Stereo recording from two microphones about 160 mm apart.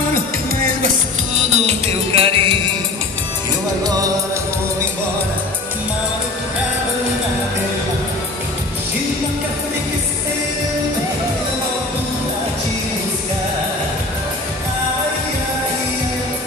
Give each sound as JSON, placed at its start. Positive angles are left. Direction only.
{"t": 0.1, "sound": "music", "side_deg": -60}
{"t": 1.4, "sound": "music", "side_deg": -45}
{"t": 3.8, "sound": "music", "side_deg": -25}